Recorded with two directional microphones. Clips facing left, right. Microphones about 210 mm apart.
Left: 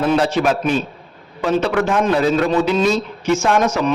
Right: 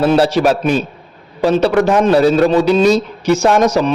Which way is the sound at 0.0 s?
35° right (ahead or behind).